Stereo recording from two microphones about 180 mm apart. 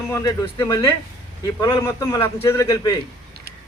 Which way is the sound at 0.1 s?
20° left (ahead or behind).